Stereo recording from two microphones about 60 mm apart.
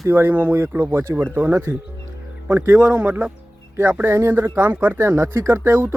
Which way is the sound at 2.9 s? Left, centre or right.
Right.